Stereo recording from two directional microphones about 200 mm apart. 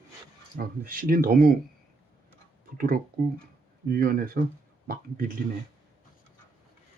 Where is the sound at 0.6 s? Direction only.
45° right (ahead or behind).